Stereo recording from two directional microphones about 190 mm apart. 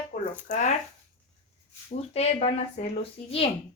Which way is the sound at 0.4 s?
40° left (ahead or behind).